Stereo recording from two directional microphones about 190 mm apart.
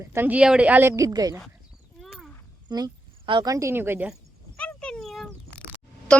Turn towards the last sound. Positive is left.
turn(degrees=5)  # may be behind; listen again after turning